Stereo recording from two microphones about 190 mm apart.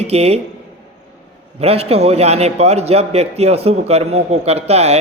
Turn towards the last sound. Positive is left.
turn(degrees=-35)  # may be behind; listen again after turning